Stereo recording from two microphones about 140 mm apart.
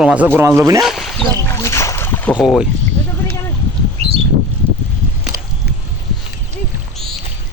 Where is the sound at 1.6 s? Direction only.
20° left (ahead or behind).